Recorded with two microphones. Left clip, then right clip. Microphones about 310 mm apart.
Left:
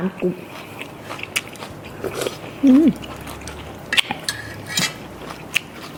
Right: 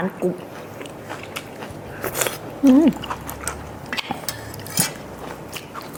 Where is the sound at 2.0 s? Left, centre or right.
Right.